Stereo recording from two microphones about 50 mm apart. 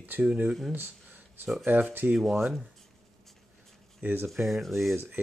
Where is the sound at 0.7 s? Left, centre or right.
Right.